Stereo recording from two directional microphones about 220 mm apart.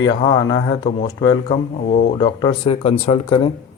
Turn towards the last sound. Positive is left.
turn(degrees=25)  # may be behind; listen again after turning